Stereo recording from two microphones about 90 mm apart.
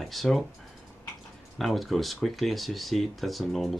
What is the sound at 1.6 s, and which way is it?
Speech, centre (ahead or behind).